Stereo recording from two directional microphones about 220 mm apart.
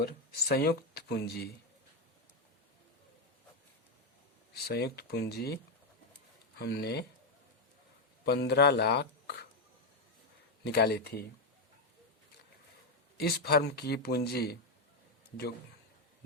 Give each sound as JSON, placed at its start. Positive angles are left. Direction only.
{"t": 0.0, "sound": "speech", "side_deg": 45}
{"t": 4.5, "sound": "speech", "side_deg": 45}
{"t": 6.6, "sound": "speech", "side_deg": 50}
{"t": 8.2, "sound": "speech", "side_deg": 50}
{"t": 10.6, "sound": "speech", "side_deg": 50}
{"t": 13.1, "sound": "speech", "side_deg": 45}